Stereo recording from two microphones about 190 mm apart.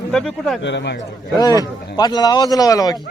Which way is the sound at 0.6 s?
70° left (ahead or behind).